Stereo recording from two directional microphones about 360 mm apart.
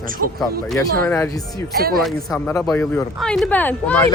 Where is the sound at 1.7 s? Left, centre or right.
Right.